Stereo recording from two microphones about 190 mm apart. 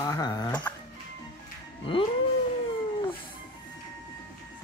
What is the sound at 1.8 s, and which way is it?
Speech, 30° left (ahead or behind).